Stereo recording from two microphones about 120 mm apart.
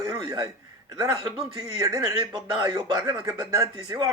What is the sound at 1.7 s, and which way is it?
Speech, 30° right (ahead or behind).